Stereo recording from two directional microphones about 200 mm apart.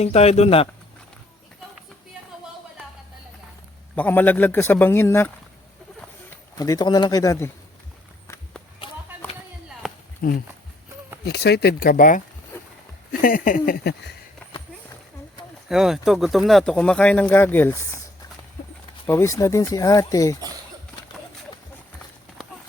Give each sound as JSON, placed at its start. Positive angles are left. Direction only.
{"t": 0.0, "sound": "speech", "side_deg": 30}
{"t": 3.9, "sound": "speech", "side_deg": 10}
{"t": 6.6, "sound": "speech", "side_deg": 20}
{"t": 9.2, "sound": "a sound", "side_deg": 10}
{"t": 10.2, "sound": "speech", "side_deg": 50}
{"t": 15.7, "sound": "speech", "side_deg": 0}
{"t": 19.0, "sound": "speech", "side_deg": 10}